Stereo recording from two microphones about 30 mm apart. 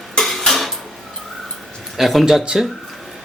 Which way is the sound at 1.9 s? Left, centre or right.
Centre.